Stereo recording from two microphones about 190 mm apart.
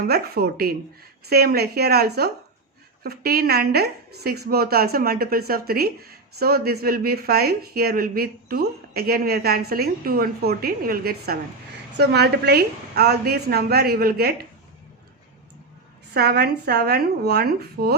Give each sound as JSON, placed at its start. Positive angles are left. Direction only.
{"t": 0.0, "sound": "a woman's voice", "side_deg": -55}
{"t": 16.1, "sound": "a woman's voice", "side_deg": -60}